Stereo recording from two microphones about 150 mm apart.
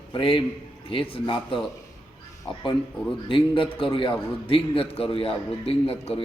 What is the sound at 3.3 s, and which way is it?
A man's voice, 35° left (ahead or behind).